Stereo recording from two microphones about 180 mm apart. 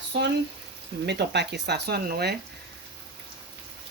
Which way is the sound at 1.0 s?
70° right (ahead or behind).